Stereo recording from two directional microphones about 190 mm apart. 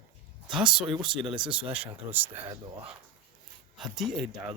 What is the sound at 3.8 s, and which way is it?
Speech, centre (ahead or behind).